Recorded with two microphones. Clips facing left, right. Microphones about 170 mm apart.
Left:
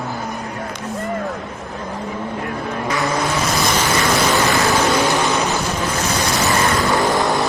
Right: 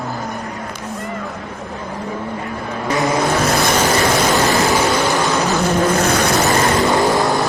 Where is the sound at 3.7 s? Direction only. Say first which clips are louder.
Right 3 dB; 10° right (ahead or behind).